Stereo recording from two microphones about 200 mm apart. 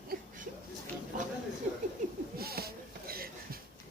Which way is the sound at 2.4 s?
50° right (ahead or behind).